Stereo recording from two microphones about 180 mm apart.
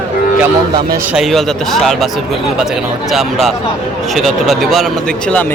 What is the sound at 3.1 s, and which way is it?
Speech, centre (ahead or behind).